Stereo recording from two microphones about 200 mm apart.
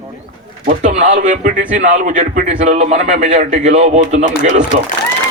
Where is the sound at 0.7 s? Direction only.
40° right (ahead or behind).